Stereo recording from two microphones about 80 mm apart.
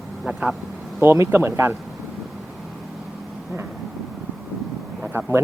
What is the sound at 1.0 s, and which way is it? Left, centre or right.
Speech, right.